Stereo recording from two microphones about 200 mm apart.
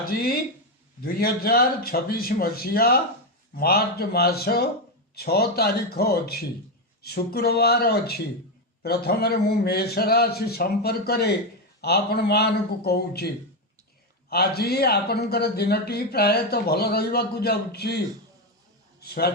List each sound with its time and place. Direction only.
0.0 s a man's voice: 50° left (ahead or behind)